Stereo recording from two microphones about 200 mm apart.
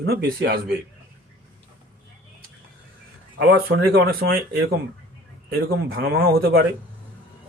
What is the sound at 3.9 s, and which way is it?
Speech, 50° right (ahead or behind).